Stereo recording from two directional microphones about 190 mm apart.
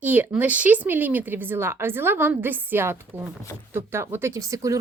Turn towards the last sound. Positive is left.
turn(degrees=-15)  # may be behind; listen again after turning